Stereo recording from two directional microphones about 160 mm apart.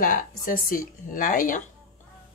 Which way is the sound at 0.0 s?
60° left (ahead or behind).